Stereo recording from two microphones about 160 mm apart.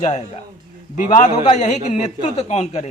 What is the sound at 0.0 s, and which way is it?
Speech, 45° left (ahead or behind).